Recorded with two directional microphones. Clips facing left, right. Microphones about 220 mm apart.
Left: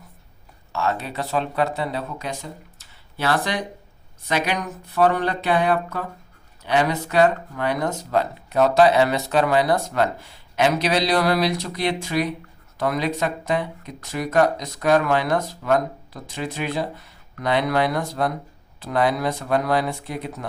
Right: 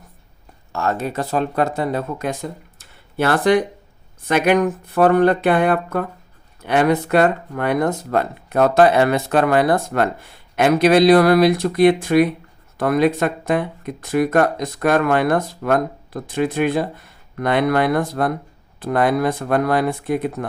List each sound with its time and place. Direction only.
0.7 s speech: 45° right (ahead or behind)